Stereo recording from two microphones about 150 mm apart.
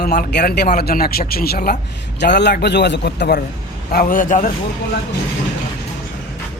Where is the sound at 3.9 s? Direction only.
70° left (ahead or behind).